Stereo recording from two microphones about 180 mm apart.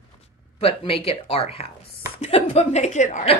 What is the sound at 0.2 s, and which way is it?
Speech, 30° left (ahead or behind).